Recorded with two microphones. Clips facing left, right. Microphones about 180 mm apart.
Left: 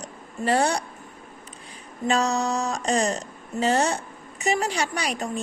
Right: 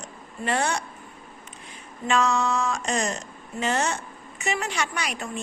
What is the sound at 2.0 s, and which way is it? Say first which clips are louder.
Speech: even; 40° left (ahead or behind).